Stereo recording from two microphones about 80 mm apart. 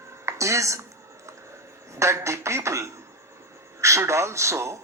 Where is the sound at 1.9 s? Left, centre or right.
Right.